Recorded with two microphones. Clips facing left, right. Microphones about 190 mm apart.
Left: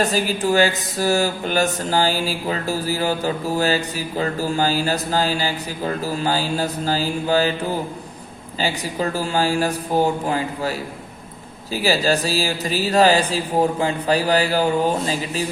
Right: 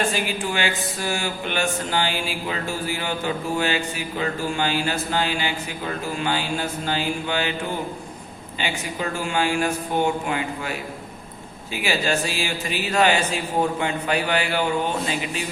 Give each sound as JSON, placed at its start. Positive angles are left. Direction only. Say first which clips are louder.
{"t": 0.0, "sound": "speech", "louder": "left 5 dB", "side_deg": 40}